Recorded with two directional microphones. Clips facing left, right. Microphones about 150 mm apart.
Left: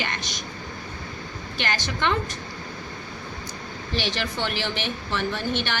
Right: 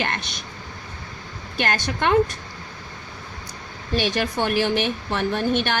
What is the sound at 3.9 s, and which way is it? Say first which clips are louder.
A woman's voice: right 5 dB; 50° right (ahead or behind).